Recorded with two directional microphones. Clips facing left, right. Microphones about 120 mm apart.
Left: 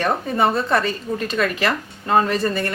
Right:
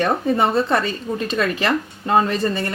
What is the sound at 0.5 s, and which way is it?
Speech, 30° right (ahead or behind).